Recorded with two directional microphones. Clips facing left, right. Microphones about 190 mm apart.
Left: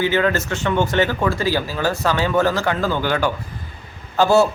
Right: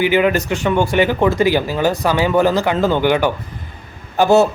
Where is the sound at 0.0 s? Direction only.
15° right (ahead or behind).